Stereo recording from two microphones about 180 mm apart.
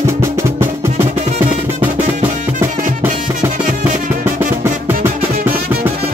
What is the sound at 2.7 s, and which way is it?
Music, 45° right (ahead or behind).